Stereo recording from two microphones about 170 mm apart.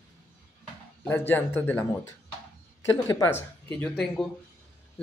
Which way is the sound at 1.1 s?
10° left (ahead or behind).